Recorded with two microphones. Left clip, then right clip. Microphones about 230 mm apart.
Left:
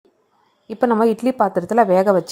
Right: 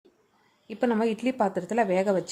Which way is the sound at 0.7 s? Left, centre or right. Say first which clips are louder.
Left 10 dB; left.